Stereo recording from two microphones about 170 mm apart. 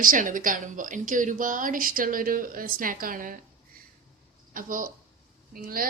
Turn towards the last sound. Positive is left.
turn(degrees=-60)  # may be behind; listen again after turning